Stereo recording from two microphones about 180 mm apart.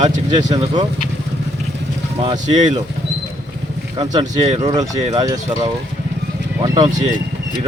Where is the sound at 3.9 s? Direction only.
25° right (ahead or behind).